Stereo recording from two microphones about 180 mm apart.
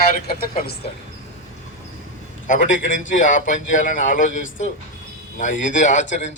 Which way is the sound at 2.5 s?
45° left (ahead or behind).